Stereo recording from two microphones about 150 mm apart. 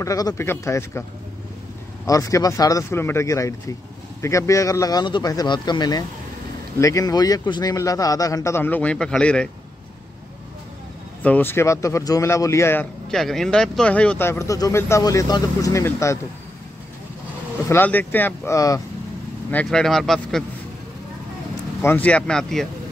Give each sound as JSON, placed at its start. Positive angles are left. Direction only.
{"t": 0.0, "sound": "a man's voice", "side_deg": 25}
{"t": 2.0, "sound": "a man's voice", "side_deg": 20}
{"t": 11.2, "sound": "a man's voice", "side_deg": 10}
{"t": 13.1, "sound": "speech", "side_deg": 0}
{"t": 17.6, "sound": "speech", "side_deg": 15}
{"t": 19.5, "sound": "speech", "side_deg": 5}
{"t": 21.8, "sound": "speech", "side_deg": 10}